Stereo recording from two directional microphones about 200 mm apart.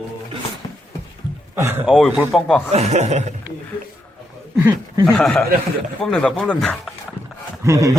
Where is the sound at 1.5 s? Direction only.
10° right (ahead or behind).